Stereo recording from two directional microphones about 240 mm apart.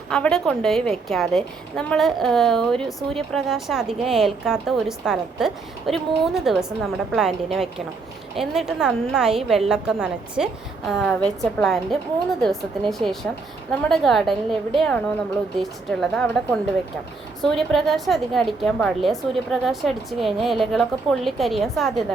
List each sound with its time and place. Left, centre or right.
0.1 s a woman's voice: centre